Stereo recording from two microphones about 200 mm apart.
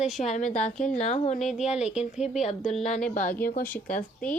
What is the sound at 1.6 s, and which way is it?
Speech, 35° left (ahead or behind).